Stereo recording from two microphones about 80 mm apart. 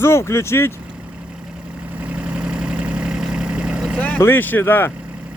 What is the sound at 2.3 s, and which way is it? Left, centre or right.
Vehicle, centre.